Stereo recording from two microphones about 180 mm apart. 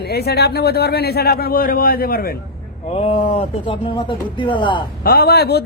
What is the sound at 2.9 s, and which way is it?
Speech, 35° left (ahead or behind).